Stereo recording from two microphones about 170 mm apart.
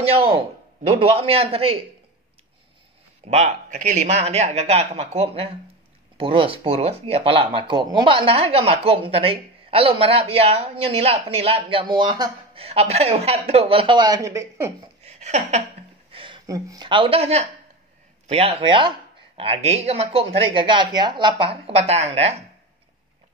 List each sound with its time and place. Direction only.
0.8 s speech: 35° right (ahead or behind)
3.3 s speech: 45° right (ahead or behind); by 14.7 s 20° right (ahead or behind)
15.1 s speech: 40° right (ahead or behind)
16.1 s a sound: 30° right (ahead or behind)
16.4 s speech: 20° right (ahead or behind); by 22.3 s 40° right (ahead or behind)